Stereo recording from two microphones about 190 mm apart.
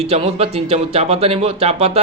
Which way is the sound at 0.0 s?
30° right (ahead or behind).